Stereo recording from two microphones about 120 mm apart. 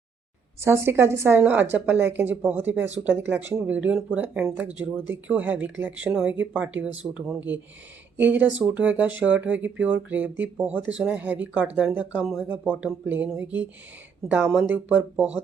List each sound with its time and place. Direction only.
0.6 s a woman's voice: 20° right (ahead or behind)
12.2 s speech: centre (ahead or behind)
12.5 s a woman's voice: 15° right (ahead or behind)